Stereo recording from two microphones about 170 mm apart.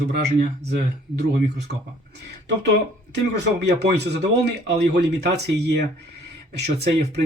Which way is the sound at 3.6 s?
85° right.